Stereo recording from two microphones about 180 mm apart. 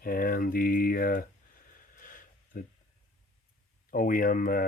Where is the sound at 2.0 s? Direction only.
50° left (ahead or behind).